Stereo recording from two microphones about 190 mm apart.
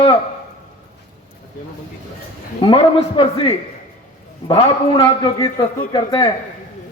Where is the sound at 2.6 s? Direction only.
25° left (ahead or behind).